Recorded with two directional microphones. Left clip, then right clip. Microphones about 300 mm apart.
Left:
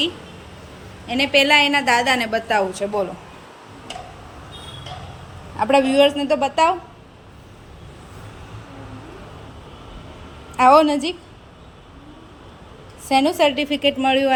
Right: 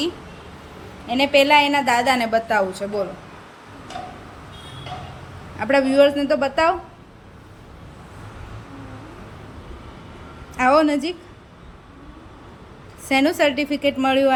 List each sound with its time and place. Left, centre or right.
1.0 s a woman's voice: centre
5.5 s a woman's voice: centre
10.6 s a woman's voice: centre
13.1 s a woman's voice: centre